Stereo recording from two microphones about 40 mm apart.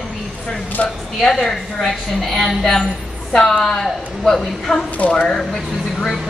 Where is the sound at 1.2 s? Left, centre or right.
Centre.